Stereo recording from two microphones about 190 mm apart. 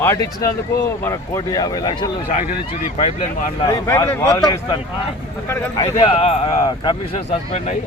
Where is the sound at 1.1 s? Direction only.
15° left (ahead or behind).